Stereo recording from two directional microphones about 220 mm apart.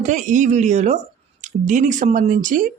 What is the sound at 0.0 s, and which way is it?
Speech, 35° right (ahead or behind).